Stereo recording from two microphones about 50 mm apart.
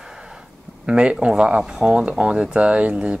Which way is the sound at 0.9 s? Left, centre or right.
Centre.